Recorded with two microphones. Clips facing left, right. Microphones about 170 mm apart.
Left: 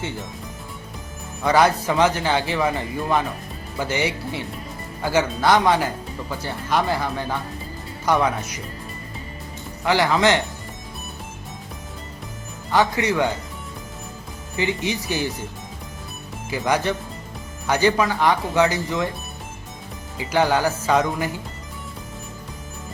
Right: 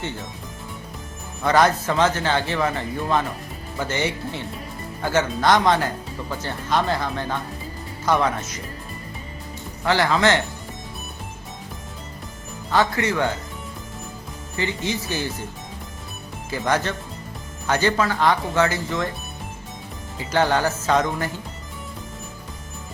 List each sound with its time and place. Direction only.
1.5 s speech: 10° left (ahead or behind)
9.8 s speech: 15° left (ahead or behind)
12.7 s speech: 15° left (ahead or behind)
14.5 s speech: 15° left (ahead or behind)
16.5 s speech: 10° left (ahead or behind)
20.1 s speech: 10° left (ahead or behind)